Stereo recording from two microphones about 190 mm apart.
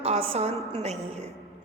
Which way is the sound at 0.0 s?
30° right (ahead or behind).